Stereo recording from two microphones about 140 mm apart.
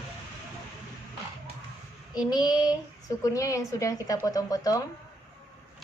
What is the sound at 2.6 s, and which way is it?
A woman's voice, 25° left (ahead or behind).